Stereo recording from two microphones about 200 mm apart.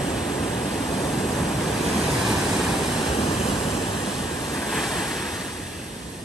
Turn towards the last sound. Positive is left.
turn(degrees=0)  # may be behind; listen again after turning